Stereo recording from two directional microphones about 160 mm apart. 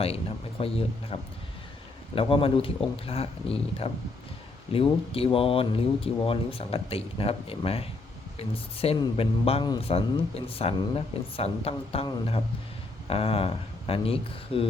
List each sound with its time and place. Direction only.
0.0 s a man's voice: 35° left (ahead or behind)